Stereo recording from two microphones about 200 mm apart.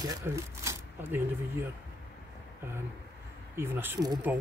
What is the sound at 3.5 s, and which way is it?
Speech, 10° right (ahead or behind).